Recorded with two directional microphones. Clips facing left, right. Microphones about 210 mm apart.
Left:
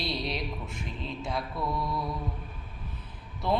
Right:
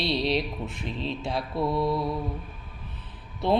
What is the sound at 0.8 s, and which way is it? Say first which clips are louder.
Mantra: right 6 dB; 25° right (ahead or behind).